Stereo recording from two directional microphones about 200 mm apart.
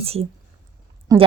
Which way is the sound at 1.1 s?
20° right (ahead or behind).